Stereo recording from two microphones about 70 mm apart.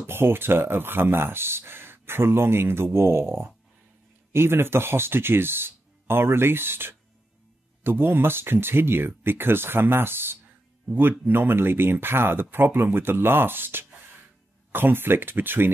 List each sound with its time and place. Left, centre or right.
0.0 s speech: right